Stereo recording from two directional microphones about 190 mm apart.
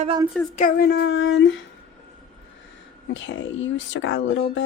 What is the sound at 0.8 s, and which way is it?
Speech, 60° left (ahead or behind).